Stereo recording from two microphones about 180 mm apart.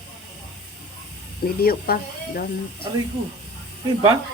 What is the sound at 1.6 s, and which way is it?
Speech, 55° left (ahead or behind).